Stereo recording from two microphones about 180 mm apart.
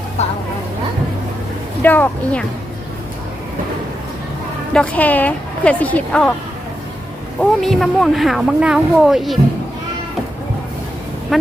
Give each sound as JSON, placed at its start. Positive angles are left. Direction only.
{"t": 0.2, "sound": "speech", "side_deg": 40}
{"t": 1.8, "sound": "speech", "side_deg": 10}
{"t": 4.7, "sound": "speech", "side_deg": 5}
{"t": 7.6, "sound": "speech", "side_deg": 0}
{"t": 11.3, "sound": "speech", "side_deg": 0}